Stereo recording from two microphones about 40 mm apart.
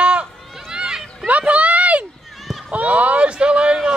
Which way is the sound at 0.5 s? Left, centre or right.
Centre.